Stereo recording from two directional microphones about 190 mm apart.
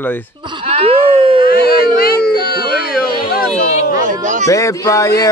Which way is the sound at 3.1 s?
50° left (ahead or behind).